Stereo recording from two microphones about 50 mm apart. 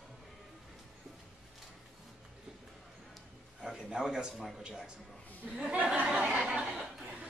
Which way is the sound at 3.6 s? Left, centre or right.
Centre.